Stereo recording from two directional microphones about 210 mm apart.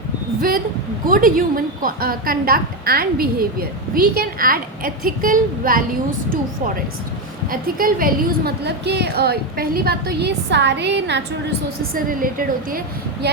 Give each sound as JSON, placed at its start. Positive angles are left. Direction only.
{"t": 1.0, "sound": "a woman's voice", "side_deg": -40}
{"t": 11.9, "sound": "a woman's voice", "side_deg": -40}